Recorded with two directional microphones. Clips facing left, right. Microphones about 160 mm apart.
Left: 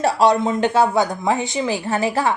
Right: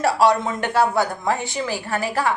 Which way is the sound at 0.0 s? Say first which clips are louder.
Left 2 dB; 25° left (ahead or behind).